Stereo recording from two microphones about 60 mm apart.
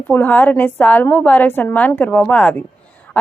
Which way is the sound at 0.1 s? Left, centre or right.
Left.